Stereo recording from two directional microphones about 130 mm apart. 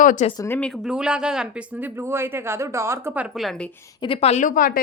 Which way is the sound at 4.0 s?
45° left (ahead or behind).